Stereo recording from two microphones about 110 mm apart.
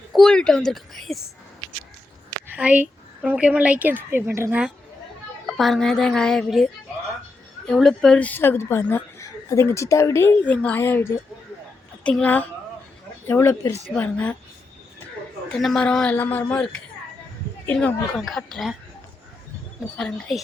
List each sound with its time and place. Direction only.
0.1 s a woman's voice: 5° left (ahead or behind)
2.5 s speech: 10° right (ahead or behind)
5.5 s a woman's voice: centre (ahead or behind)
7.7 s speech: 5° left (ahead or behind); by 10.3 s 25° left (ahead or behind)
10.4 s speech: 15° left (ahead or behind)
13.9 s speech: 10° left (ahead or behind)
15.5 s speech: 5° left (ahead or behind)
17.7 s speech: 15° left (ahead or behind)
18.2 s a woman's voice: centre (ahead or behind)
20.0 s a woman's voice: 5° left (ahead or behind)